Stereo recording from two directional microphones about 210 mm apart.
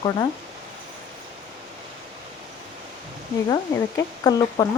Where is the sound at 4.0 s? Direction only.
20° left (ahead or behind).